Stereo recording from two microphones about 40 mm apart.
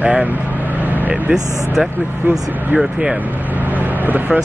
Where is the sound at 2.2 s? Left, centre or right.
Right.